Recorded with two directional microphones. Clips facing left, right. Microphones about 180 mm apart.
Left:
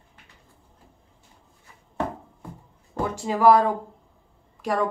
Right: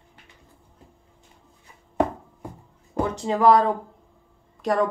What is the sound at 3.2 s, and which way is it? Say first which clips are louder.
Speech: even; 10° left (ahead or behind).